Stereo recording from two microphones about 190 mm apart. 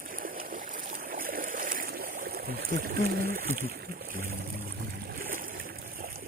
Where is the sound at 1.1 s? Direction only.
45° right (ahead or behind).